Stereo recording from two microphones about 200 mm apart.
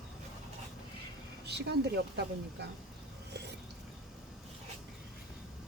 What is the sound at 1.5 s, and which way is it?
Speech, 55° right (ahead or behind).